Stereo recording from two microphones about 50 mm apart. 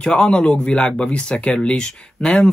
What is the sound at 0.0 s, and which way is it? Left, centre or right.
Speech, centre.